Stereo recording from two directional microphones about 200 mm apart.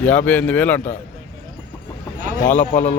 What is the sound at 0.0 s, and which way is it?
Speech, 5° left (ahead or behind).